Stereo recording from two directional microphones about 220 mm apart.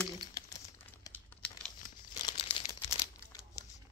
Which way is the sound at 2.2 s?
25° left (ahead or behind).